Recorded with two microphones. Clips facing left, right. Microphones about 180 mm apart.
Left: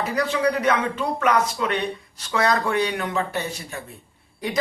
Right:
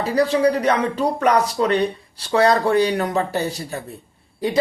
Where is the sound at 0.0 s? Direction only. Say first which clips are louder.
Right 5 dB; 30° right (ahead or behind).